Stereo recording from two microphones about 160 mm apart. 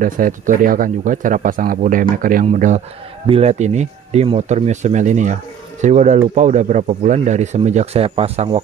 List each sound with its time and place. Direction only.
0.0 s speech: 55° right (ahead or behind)
3.3 s speech: 40° right (ahead or behind)